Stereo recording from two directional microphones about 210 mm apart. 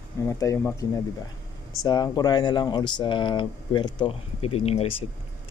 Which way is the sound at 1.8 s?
20° left (ahead or behind).